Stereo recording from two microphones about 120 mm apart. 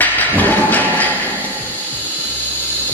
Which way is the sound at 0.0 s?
15° left (ahead or behind).